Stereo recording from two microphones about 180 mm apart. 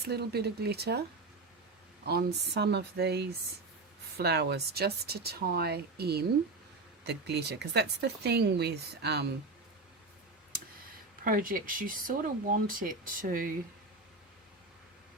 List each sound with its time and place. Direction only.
0.0 s speech: 65° right (ahead or behind)
2.0 s speech: 65° right (ahead or behind)
11.2 s speech: 50° right (ahead or behind)